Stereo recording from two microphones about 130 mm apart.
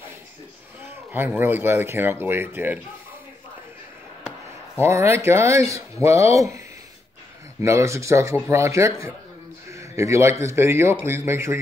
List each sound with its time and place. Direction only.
0.8 s speech: 15° right (ahead or behind)
4.7 s speech: 20° right (ahead or behind)
7.6 s speech: 20° right (ahead or behind)
9.7 s a sound: 25° right (ahead or behind)
10.4 s speech: 20° right (ahead or behind)